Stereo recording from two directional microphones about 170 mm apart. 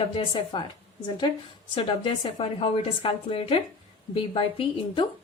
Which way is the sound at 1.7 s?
35° left (ahead or behind).